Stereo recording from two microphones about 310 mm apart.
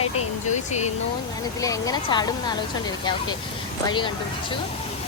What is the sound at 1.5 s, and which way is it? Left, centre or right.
A woman's voice, centre.